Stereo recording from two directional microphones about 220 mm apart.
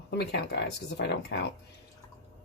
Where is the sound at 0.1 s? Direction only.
50° left (ahead or behind).